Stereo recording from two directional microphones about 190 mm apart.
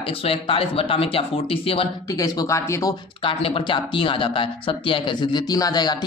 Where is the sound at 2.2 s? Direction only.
15° left (ahead or behind).